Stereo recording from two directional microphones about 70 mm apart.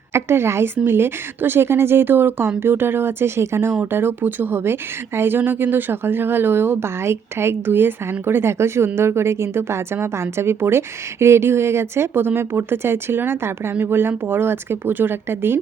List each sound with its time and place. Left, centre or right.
0.1 s a woman's voice: right